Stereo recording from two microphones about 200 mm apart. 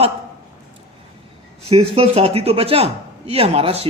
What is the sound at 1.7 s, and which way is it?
Speech, 30° right (ahead or behind).